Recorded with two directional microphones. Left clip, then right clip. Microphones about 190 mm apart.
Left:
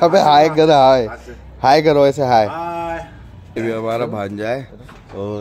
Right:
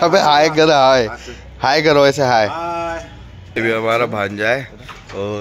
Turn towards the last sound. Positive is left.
turn(degrees=10)  # may be behind; listen again after turning